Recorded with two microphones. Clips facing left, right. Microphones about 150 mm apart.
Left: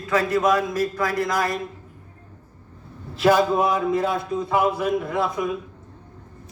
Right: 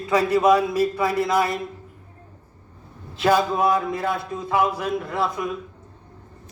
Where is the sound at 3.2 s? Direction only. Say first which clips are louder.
Left 2 dB; 5° left (ahead or behind).